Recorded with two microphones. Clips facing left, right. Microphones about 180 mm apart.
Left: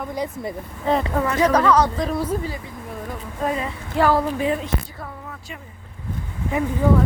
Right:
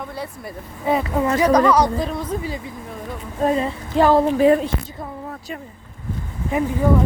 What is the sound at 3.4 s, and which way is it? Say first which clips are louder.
Speech: right 5 dB; 30° right (ahead or behind).